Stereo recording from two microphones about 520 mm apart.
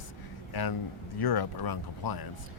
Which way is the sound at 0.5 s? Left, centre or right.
Left.